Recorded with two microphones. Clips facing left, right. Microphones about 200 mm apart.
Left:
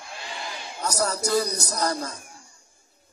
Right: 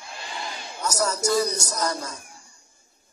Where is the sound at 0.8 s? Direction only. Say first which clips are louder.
Right 1 dB; 35° left (ahead or behind).